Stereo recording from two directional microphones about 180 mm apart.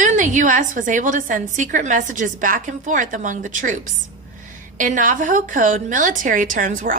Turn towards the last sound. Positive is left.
turn(degrees=-45)  # may be behind; listen again after turning